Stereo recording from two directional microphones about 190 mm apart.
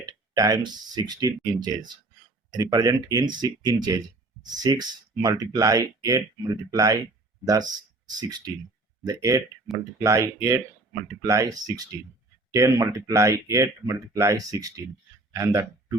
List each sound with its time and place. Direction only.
0.0 s speech: 20° right (ahead or behind)